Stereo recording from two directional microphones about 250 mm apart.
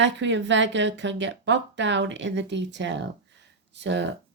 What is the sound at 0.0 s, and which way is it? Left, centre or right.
Speech, right.